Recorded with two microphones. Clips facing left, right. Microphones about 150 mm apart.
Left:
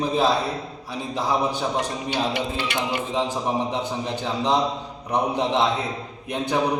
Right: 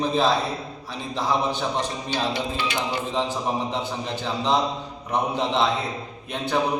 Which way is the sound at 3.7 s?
15° left (ahead or behind).